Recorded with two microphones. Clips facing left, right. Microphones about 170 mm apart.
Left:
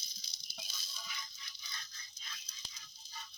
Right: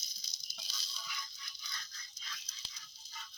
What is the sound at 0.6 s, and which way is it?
Music, 50° left (ahead or behind).